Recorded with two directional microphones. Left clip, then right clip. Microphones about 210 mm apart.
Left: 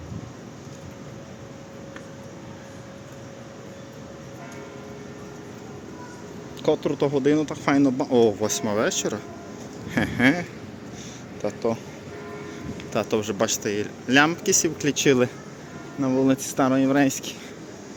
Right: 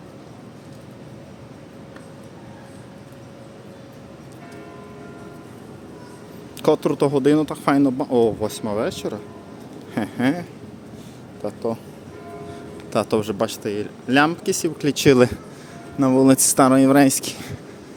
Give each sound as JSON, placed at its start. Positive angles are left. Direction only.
{"t": 6.6, "sound": "speech", "side_deg": -35}
{"t": 11.4, "sound": "speech", "side_deg": -5}
{"t": 12.9, "sound": "speech", "side_deg": -25}
{"t": 13.4, "sound": "speech", "side_deg": -10}